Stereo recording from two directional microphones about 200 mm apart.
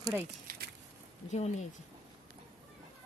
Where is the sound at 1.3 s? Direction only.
35° left (ahead or behind).